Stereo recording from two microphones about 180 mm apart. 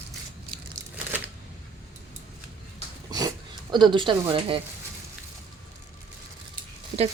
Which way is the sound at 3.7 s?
25° right (ahead or behind).